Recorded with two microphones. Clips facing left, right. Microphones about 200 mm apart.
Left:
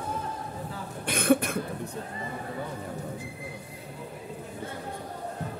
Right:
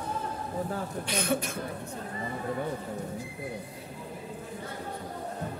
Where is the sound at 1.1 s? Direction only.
55° left (ahead or behind).